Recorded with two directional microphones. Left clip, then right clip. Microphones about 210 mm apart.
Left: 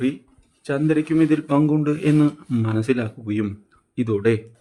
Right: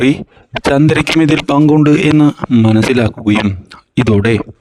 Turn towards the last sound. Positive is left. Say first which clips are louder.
# right 8 dB
turn(degrees=-45)  # may be behind; listen again after turning